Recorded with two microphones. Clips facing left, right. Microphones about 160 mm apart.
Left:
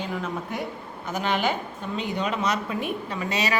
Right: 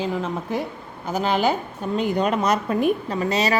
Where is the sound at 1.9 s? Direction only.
45° right (ahead or behind).